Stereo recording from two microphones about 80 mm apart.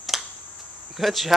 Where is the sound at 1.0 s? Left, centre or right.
Centre.